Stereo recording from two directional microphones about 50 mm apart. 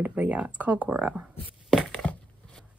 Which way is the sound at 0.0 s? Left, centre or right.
Right.